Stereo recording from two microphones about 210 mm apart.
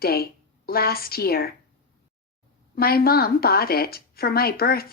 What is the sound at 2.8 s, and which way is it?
Speech, 45° left (ahead or behind).